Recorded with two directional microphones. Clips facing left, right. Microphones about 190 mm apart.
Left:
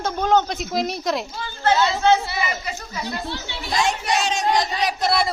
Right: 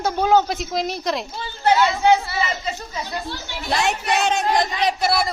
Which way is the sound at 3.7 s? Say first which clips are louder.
Right 1 dB; 65° right (ahead or behind).